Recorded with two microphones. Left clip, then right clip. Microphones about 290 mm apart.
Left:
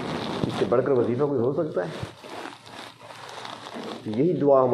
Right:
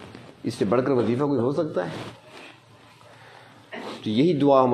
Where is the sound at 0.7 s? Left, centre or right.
Right.